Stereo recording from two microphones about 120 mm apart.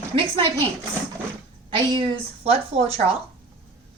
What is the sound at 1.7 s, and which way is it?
Speech, 45° right (ahead or behind).